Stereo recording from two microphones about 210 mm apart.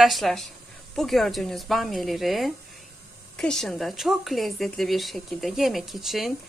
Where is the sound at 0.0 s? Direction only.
Centre (ahead or behind).